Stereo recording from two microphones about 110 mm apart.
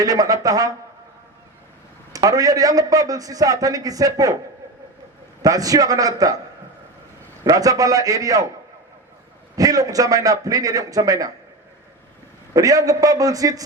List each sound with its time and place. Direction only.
0.0 s a man's voice: 35° right (ahead or behind)
2.1 s a man's voice: 35° right (ahead or behind)
5.4 s a man's voice: 35° right (ahead or behind)
7.4 s a man's voice: 35° right (ahead or behind)
9.6 s a man's voice: 35° right (ahead or behind)
12.5 s a man's voice: 35° right (ahead or behind)